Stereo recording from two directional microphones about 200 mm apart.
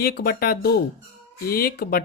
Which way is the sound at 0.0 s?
50° left (ahead or behind).